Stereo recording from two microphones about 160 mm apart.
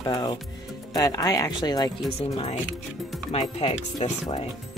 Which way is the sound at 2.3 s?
35° left (ahead or behind).